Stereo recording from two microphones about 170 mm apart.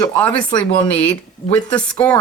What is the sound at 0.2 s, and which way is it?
Speech, 5° left (ahead or behind).